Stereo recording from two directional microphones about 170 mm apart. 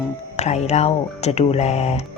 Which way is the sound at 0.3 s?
40° left (ahead or behind).